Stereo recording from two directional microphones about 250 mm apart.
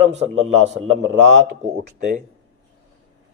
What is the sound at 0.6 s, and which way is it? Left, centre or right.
Speech, right.